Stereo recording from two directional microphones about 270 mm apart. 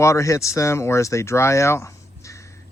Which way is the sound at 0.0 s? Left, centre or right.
Centre.